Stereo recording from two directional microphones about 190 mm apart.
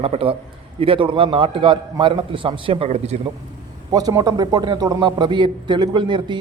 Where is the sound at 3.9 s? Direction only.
20° right (ahead or behind).